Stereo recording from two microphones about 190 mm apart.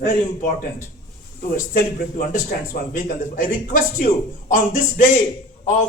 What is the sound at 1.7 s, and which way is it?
A man's voice, 50° left (ahead or behind).